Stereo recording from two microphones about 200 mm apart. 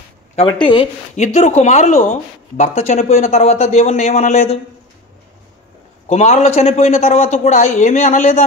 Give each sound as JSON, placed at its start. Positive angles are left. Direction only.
{"t": 0.4, "sound": "speech", "side_deg": 25}
{"t": 6.0, "sound": "speech", "side_deg": 35}